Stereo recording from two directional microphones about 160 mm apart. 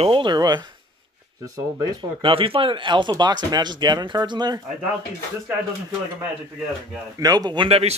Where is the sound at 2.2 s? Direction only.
35° right (ahead or behind).